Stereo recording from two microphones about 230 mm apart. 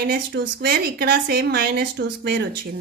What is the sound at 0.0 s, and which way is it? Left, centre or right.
A woman's voice, right.